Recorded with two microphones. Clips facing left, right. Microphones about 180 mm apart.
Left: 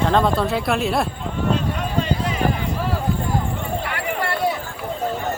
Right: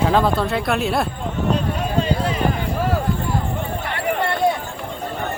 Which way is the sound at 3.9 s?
25° right (ahead or behind).